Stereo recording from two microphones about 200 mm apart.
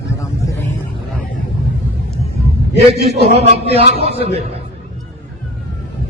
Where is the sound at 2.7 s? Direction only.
30° right (ahead or behind).